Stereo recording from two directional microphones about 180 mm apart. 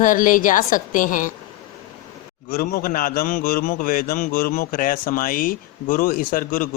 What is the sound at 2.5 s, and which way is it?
A woman's voice, 55° left (ahead or behind).